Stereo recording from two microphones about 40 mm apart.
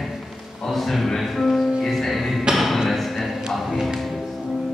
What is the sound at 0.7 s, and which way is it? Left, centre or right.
Speech, centre.